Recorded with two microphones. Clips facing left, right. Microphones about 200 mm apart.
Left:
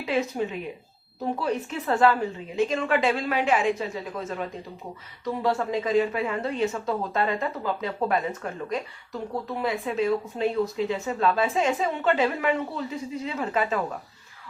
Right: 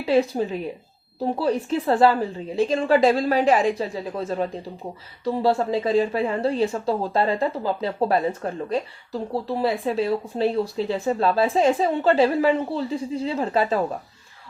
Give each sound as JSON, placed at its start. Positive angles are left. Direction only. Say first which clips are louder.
{"t": 0.0, "sound": "speech", "louder": "right 6 dB", "side_deg": -35}